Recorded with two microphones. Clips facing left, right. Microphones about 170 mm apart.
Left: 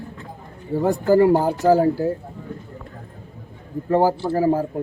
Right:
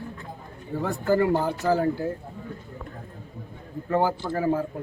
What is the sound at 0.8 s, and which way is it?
Speech, 40° left (ahead or behind).